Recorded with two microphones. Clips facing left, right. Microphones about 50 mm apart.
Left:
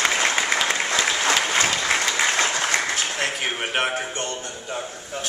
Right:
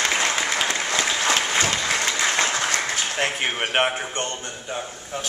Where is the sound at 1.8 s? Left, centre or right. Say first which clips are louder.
Left 1 dB; left.